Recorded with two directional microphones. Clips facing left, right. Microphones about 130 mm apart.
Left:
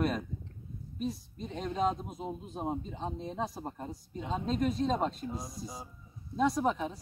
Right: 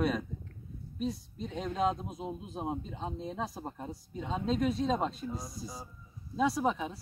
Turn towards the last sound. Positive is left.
turn(degrees=0)  # may be behind; listen again after turning